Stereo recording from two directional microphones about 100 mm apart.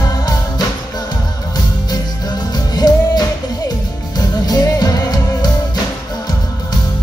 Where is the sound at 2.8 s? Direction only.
45° left (ahead or behind).